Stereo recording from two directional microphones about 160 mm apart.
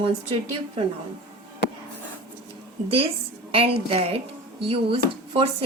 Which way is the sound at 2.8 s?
35° right (ahead or behind).